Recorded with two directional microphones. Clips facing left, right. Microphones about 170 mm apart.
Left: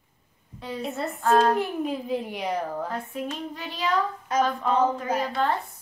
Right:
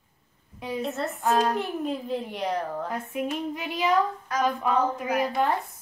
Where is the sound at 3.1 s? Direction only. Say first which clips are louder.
Right 3 dB; 15° right (ahead or behind).